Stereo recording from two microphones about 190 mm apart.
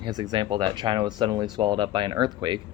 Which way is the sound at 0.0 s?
20° right (ahead or behind).